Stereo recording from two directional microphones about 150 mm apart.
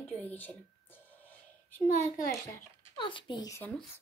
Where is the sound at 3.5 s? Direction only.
10° left (ahead or behind).